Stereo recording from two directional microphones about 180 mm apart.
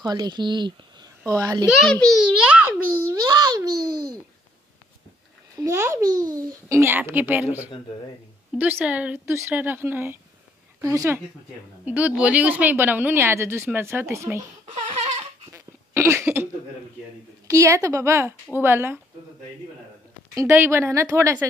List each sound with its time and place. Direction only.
0.0 s speech: 20° right (ahead or behind)
1.7 s a child's voice: 5° left (ahead or behind)
3.3 s a child's voice: 20° right (ahead or behind)
5.6 s speech: 15° right (ahead or behind)
8.5 s speech: 10° right (ahead or behind)
14.8 s a sound: 30° right (ahead or behind)
15.5 s a sound: 15° right (ahead or behind)
17.5 s speech: 15° right (ahead or behind)
20.3 s speech: 15° right (ahead or behind)